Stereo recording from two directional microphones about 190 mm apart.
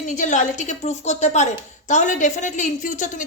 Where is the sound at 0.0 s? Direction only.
40° left (ahead or behind).